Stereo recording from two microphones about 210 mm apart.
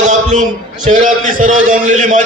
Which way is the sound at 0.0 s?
35° right (ahead or behind).